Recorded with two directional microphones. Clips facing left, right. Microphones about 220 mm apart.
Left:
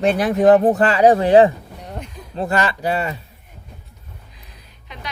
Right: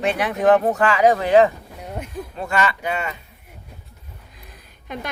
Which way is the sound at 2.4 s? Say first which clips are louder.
Left 3 dB; 35° left (ahead or behind).